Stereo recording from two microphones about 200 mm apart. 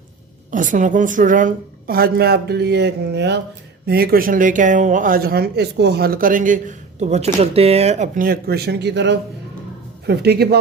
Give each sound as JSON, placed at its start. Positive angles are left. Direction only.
{"t": 0.5, "sound": "speech", "side_deg": -40}